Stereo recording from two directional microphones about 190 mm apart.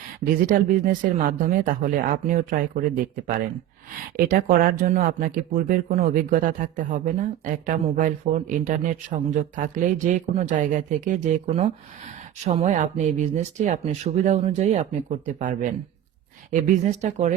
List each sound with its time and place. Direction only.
0.3 s speech: 45° right (ahead or behind)
4.3 s speech: 45° right (ahead or behind)